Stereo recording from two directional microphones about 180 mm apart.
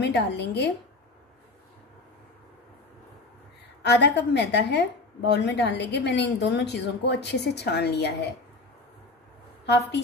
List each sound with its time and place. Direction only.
0.0 s a woman's voice: 70° left (ahead or behind)
3.8 s a woman's voice: 70° left (ahead or behind)
9.7 s a woman's voice: 70° left (ahead or behind)